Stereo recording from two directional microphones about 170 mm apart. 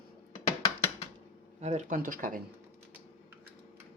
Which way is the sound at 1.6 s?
40° right (ahead or behind).